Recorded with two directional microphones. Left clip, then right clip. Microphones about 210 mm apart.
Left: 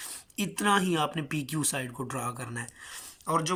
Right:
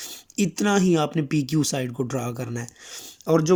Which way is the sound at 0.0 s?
20° right (ahead or behind).